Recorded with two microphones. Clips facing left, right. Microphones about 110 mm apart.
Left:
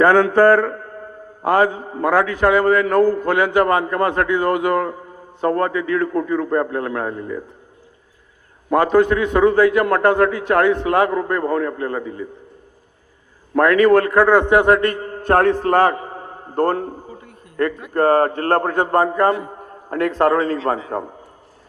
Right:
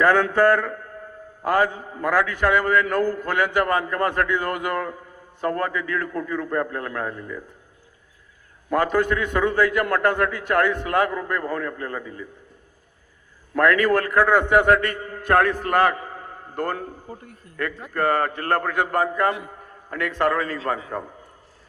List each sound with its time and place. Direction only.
0.0 s a man's voice: 20° left (ahead or behind)
0.5 s a sound: 30° left (ahead or behind)
1.5 s a man's voice: 25° left (ahead or behind)
8.7 s a man's voice: 25° left (ahead or behind)
13.6 s a man's voice: 25° left (ahead or behind)
15.0 s a sound: 35° left (ahead or behind)
16.6 s a man's voice: 45° left (ahead or behind)
17.1 s a man's voice: 50° right (ahead or behind)
17.6 s a man's voice: 35° left (ahead or behind)